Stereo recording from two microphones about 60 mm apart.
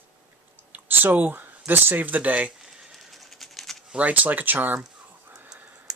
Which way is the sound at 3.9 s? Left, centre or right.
Right.